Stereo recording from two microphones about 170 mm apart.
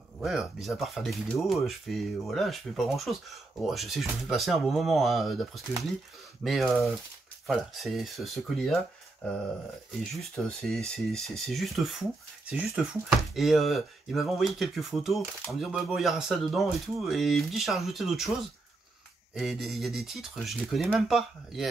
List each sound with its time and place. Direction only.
0.2 s speech: centre (ahead or behind)
10.1 s speech: 5° left (ahead or behind)
19.3 s speech: centre (ahead or behind)